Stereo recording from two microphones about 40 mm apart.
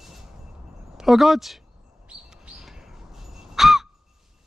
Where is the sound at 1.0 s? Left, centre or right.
Centre.